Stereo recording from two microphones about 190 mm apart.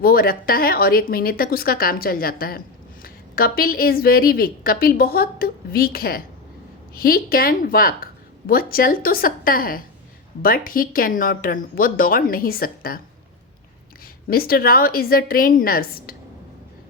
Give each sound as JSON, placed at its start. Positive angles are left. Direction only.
{"t": 0.0, "sound": "a woman's voice", "side_deg": 50}
{"t": 14.3, "sound": "a woman's voice", "side_deg": 50}